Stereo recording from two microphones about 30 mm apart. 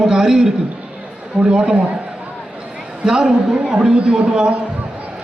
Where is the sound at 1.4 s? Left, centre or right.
Right.